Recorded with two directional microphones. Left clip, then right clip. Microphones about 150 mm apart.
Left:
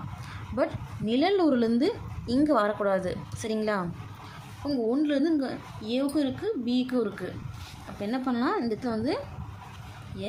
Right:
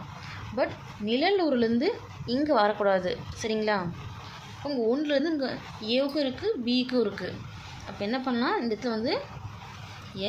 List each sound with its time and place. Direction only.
0.5 s a woman's voice: 20° left (ahead or behind); by 7.3 s 5° left (ahead or behind)
8.0 s a woman's voice: 15° left (ahead or behind)